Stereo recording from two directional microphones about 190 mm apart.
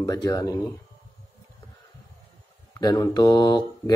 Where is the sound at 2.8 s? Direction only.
20° left (ahead or behind).